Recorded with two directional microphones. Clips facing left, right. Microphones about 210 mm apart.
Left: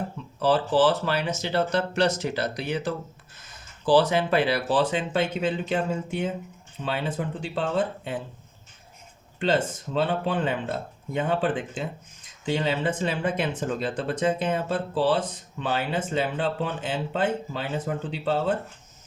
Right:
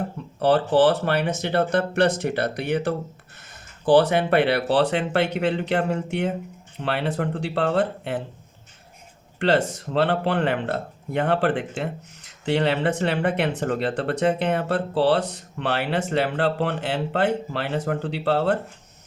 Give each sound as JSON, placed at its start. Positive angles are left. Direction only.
{"t": 0.4, "sound": "speech", "side_deg": -60}
{"t": 9.4, "sound": "speech", "side_deg": -70}